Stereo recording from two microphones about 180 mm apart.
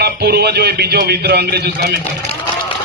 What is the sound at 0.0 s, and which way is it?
A man's voice, 65° right (ahead or behind).